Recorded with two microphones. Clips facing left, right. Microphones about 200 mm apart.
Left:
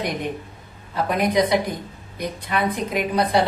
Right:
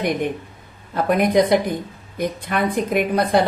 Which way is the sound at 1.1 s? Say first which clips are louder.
Right 4 dB; 50° right (ahead or behind).